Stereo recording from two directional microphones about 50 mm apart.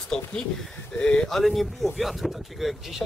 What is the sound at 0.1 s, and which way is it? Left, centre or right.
Speech, centre.